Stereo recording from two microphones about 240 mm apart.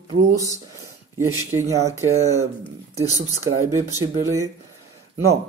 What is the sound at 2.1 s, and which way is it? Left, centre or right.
Speech, right.